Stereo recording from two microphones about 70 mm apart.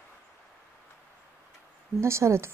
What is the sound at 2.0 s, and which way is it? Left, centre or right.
Speech, right.